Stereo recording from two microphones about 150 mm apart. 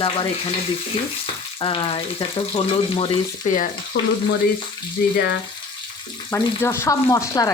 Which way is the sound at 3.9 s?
90° left.